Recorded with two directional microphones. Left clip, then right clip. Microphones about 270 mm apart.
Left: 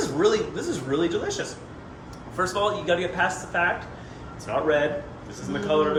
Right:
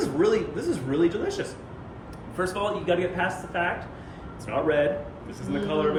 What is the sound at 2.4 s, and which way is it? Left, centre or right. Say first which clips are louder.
Speech: left 3 dB; centre.